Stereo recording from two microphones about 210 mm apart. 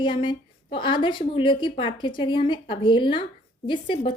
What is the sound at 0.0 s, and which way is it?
A woman's voice, 25° left (ahead or behind).